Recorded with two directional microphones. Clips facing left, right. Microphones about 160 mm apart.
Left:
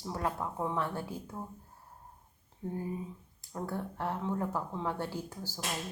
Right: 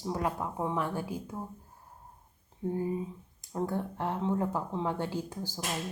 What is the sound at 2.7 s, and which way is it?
Speech, 20° right (ahead or behind).